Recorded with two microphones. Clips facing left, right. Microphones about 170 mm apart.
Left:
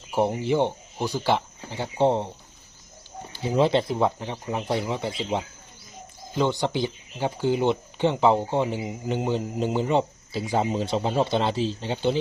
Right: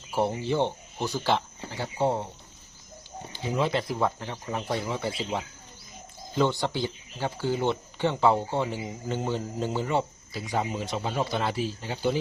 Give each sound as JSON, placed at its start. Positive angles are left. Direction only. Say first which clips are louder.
{"t": 0.1, "sound": "speech", "louder": "left 3 dB", "side_deg": 15}
{"t": 3.5, "sound": "speech", "louder": "left 6 dB", "side_deg": 30}